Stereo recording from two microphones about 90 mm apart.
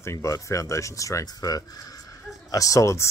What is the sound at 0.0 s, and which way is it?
Speech, 35° left (ahead or behind).